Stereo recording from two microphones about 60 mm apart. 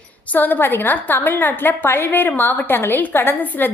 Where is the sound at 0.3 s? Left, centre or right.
Left.